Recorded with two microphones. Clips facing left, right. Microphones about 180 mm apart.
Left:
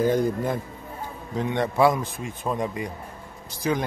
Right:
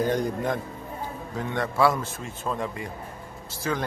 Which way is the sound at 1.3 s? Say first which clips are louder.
Left 4 dB; 20° left (ahead or behind).